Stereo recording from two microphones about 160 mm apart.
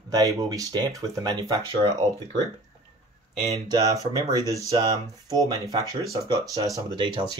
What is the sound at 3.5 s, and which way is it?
Speech, 20° right (ahead or behind).